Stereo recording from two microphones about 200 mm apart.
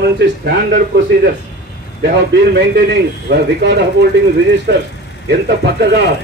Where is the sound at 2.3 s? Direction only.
65° right (ahead or behind).